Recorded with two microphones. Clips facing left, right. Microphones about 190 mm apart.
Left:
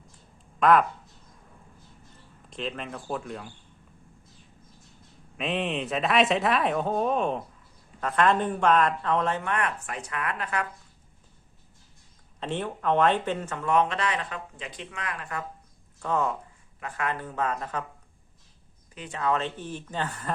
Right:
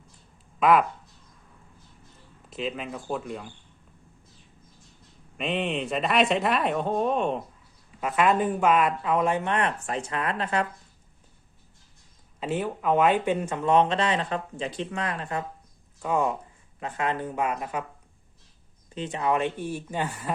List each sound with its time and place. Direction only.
0.6 s speech: centre (ahead or behind)
2.5 s speech: 5° right (ahead or behind)
5.4 s speech: centre (ahead or behind)
9.4 s speech: 25° right (ahead or behind)
12.4 s speech: 5° right (ahead or behind); by 15.4 s 25° right (ahead or behind)
16.0 s speech: 10° right (ahead or behind)
18.9 s speech: 20° right (ahead or behind)